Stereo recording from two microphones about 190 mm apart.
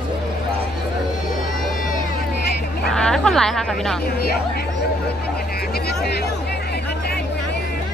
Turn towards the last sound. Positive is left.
turn(degrees=55)  # may be behind; listen again after turning